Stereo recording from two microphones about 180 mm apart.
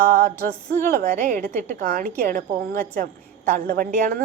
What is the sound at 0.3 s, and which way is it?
A woman's voice, 55° right (ahead or behind).